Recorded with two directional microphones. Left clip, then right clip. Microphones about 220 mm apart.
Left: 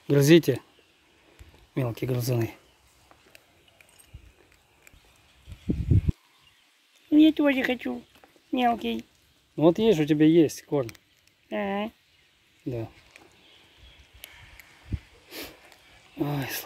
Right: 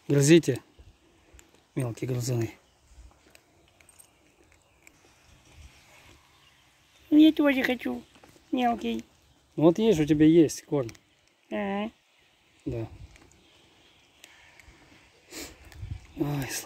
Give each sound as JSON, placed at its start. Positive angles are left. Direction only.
{"t": 0.1, "sound": "speech", "side_deg": 0}
{"t": 1.7, "sound": "speech", "side_deg": 5}
{"t": 7.1, "sound": "speech", "side_deg": 0}
{"t": 14.2, "sound": "a sound", "side_deg": 30}
{"t": 16.2, "sound": "speech", "side_deg": -5}